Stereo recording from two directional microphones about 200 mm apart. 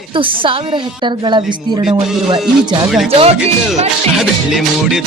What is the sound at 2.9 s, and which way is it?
Music, centre (ahead or behind).